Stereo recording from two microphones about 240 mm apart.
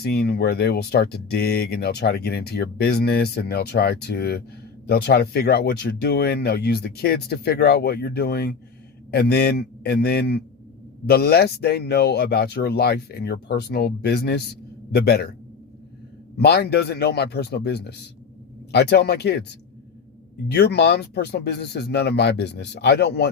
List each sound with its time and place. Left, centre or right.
0.0 s speech: left
16.4 s speech: left
20.5 s speech: left